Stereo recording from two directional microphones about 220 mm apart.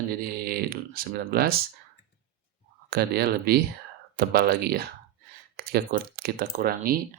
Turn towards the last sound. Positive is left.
turn(degrees=-40)  # may be behind; listen again after turning